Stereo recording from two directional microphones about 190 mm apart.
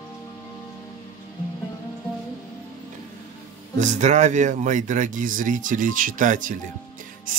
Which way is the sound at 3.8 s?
40° right (ahead or behind).